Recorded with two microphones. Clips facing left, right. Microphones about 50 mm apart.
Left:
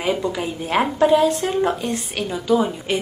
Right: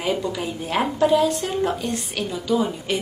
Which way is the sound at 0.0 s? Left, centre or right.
Left.